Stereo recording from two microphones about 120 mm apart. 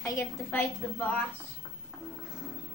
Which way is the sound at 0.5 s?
15° left (ahead or behind).